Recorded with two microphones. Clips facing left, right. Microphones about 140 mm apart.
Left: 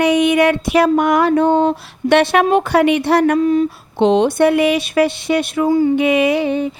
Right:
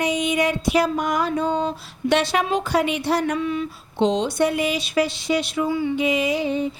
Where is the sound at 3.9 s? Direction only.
60° left (ahead or behind); by 5.9 s 45° left (ahead or behind).